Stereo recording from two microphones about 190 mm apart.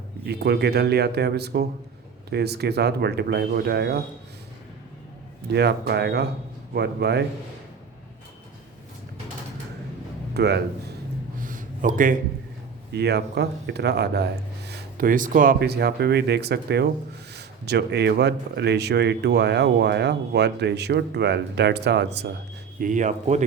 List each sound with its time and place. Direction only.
0.3 s speech: 60° right (ahead or behind)
5.5 s speech: 60° right (ahead or behind)
10.3 s speech: 60° right (ahead or behind)
11.3 s a sound: 45° right (ahead or behind)
12.9 s speech: 60° right (ahead or behind)
22.8 s speech: 40° right (ahead or behind)